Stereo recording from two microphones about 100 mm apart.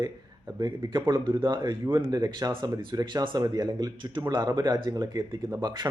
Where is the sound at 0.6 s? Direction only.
45° right (ahead or behind).